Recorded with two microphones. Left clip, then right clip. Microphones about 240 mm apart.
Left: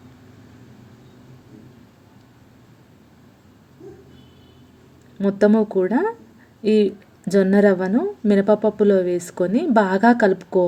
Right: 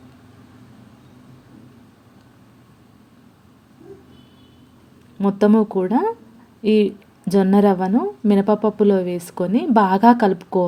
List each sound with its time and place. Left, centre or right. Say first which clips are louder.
5.2 s a woman's voice: even; centre